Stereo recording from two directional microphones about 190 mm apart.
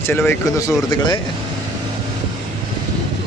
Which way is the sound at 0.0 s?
10° left (ahead or behind).